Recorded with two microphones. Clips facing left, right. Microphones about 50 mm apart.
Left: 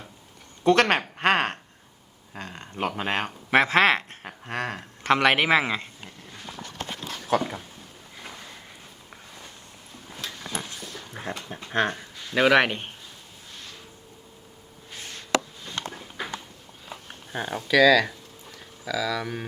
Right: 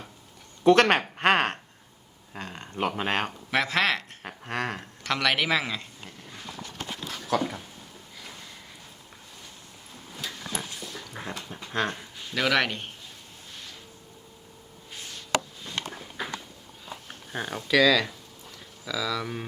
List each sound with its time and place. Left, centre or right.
0.6 s speech: centre
3.5 s speech: left
4.2 s a sound: centre
5.0 s a man's voice: left
7.3 s a man's voice: left
10.7 s dog: left
11.2 s a man's voice: left
17.3 s speech: centre